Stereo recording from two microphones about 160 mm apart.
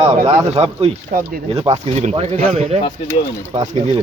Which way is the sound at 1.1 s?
60° right (ahead or behind).